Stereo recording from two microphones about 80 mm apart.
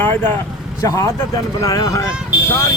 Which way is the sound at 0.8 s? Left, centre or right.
Left.